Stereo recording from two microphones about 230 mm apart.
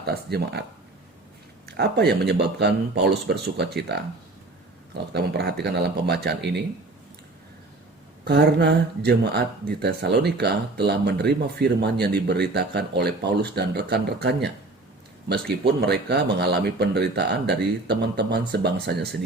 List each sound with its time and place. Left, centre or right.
0.0 s speech: right
1.6 s speech: right
5.1 s speech: right
8.2 s speech: right